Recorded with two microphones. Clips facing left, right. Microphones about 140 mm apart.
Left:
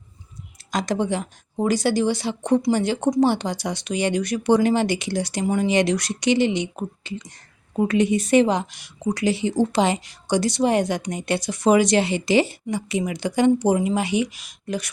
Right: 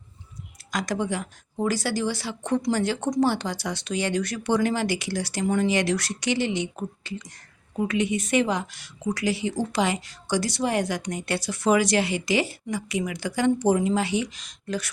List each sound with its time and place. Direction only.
0.7 s a woman's voice: 25° left (ahead or behind)
7.8 s a woman's voice: 35° left (ahead or behind); by 14.8 s 10° left (ahead or behind)